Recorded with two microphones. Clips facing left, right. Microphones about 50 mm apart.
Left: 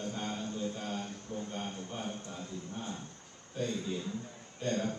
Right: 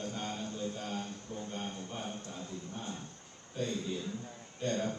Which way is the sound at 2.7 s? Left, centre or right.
Left.